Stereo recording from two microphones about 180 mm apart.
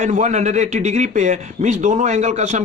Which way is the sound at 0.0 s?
40° right (ahead or behind).